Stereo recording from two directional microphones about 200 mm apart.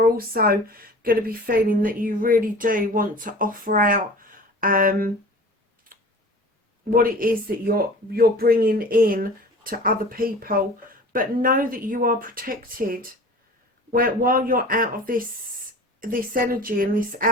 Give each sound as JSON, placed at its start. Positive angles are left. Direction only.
{"t": 0.0, "sound": "speech", "side_deg": -45}
{"t": 6.9, "sound": "speech", "side_deg": -45}